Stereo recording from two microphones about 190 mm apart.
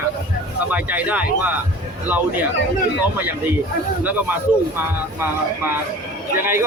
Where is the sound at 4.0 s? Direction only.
10° right (ahead or behind).